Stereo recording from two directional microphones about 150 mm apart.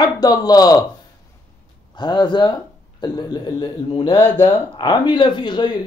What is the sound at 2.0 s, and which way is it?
A man's voice, 30° left (ahead or behind).